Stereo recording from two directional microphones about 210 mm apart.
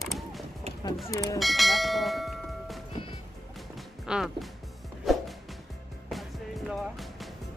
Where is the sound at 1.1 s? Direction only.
15° left (ahead or behind).